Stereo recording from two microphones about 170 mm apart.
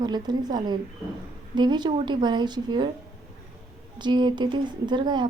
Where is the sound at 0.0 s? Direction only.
25° right (ahead or behind).